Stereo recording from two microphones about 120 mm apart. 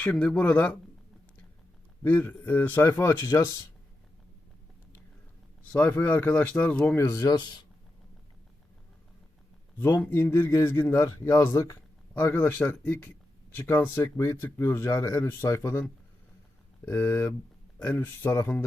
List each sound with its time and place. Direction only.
0.0 s speech: 10° left (ahead or behind)
2.0 s speech: 15° left (ahead or behind)
5.7 s speech: 15° left (ahead or behind); by 7.6 s 35° left (ahead or behind)
9.8 s speech: 20° left (ahead or behind)